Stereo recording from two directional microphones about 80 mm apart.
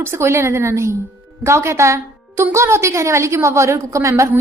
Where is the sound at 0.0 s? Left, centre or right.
Right.